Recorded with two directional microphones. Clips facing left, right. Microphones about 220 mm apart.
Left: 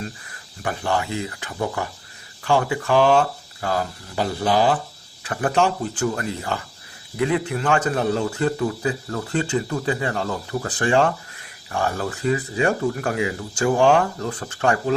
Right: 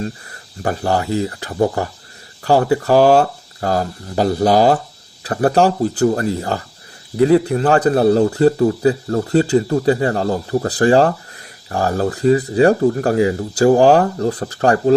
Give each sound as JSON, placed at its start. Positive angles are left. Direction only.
{"t": 0.0, "sound": "a man's voice", "side_deg": -40}